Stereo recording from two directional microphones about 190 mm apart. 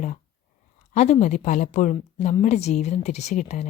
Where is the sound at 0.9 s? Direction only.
35° left (ahead or behind).